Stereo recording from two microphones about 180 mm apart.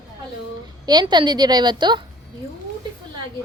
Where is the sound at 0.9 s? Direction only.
25° right (ahead or behind).